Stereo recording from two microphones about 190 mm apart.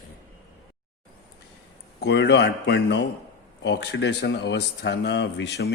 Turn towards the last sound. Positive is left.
turn(degrees=60)  # may be behind; listen again after turning